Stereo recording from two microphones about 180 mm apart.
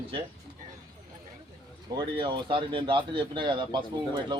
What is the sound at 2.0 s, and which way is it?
Speech, 25° right (ahead or behind).